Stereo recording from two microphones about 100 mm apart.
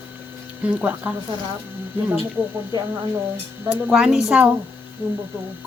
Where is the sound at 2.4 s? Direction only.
15° right (ahead or behind).